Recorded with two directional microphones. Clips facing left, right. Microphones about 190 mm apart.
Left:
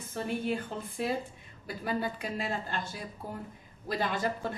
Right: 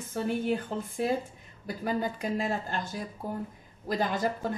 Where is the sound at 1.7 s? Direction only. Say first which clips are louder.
Right 2 dB; 45° right (ahead or behind).